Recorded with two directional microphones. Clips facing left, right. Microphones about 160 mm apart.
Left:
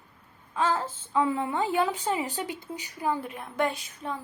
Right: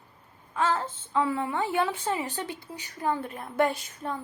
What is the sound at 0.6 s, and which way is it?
A woman's voice, 10° left (ahead or behind).